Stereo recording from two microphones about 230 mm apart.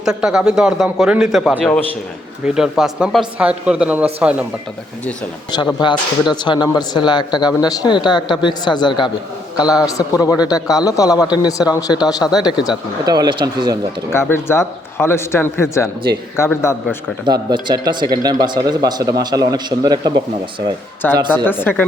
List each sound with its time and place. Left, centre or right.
0.0 s speech: centre
5.5 s speech: centre
13.1 s speech: centre
14.1 s speech: centre
17.2 s speech: centre
21.0 s speech: centre